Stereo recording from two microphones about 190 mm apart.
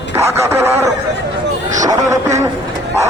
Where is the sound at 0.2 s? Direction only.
15° right (ahead or behind).